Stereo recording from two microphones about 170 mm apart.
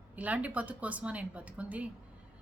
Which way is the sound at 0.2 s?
10° right (ahead or behind).